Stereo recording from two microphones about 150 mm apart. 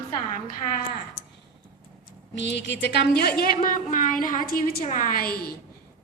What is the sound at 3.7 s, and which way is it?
A woman's voice, 65° left (ahead or behind).